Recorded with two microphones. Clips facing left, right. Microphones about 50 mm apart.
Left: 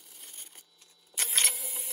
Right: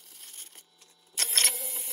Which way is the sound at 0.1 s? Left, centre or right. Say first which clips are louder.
Right 1 dB; centre.